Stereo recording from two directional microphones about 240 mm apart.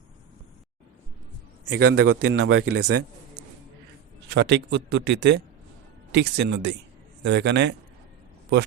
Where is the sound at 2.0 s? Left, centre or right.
Right.